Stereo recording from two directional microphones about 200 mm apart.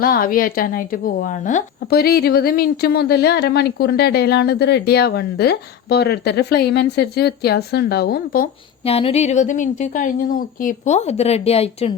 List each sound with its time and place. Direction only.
0.0 s a woman's voice: 45° left (ahead or behind)
8.8 s a woman's voice: 30° left (ahead or behind)